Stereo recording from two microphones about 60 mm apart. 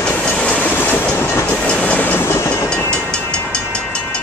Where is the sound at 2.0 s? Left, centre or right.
Left.